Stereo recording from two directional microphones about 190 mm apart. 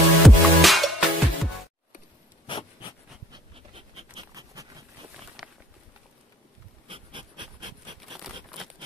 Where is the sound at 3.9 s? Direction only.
20° right (ahead or behind).